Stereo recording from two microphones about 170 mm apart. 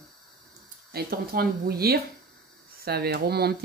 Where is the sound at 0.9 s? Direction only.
65° right (ahead or behind).